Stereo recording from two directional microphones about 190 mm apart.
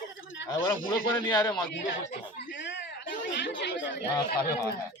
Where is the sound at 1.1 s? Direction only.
15° left (ahead or behind).